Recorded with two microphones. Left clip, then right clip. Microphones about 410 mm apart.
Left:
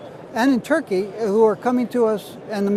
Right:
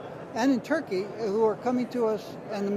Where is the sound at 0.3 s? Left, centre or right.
Left.